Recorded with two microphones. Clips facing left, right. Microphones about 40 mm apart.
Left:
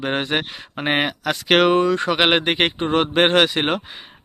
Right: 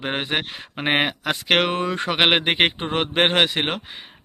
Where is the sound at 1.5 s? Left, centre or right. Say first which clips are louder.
Left 5 dB; centre.